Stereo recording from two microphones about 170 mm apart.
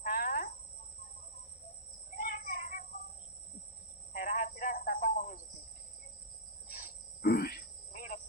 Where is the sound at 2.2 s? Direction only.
55° left (ahead or behind).